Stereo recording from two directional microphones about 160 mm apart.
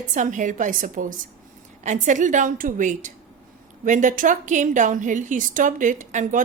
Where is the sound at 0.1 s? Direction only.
50° right (ahead or behind).